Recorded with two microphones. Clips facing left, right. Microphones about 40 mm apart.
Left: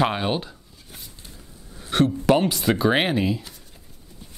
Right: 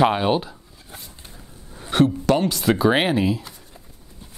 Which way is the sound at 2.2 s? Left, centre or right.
Centre.